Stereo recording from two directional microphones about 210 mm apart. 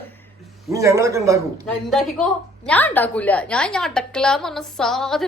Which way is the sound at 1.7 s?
Centre (ahead or behind).